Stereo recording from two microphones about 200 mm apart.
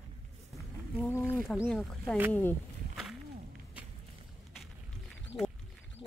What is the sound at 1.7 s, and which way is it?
Speech, centre (ahead or behind).